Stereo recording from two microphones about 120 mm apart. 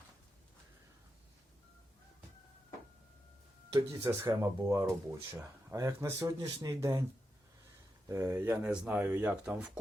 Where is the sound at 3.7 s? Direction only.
25° right (ahead or behind).